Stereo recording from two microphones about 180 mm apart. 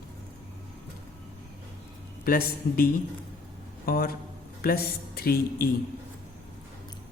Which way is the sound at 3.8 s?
55° left (ahead or behind).